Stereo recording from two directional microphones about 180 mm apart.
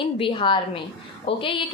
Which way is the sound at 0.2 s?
30° left (ahead or behind).